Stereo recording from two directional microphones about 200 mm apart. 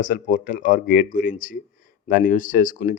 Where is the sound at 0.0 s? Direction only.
40° left (ahead or behind).